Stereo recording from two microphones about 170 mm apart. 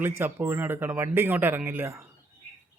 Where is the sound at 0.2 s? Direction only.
10° right (ahead or behind).